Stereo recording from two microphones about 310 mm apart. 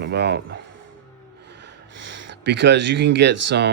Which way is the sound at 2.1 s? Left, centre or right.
Right.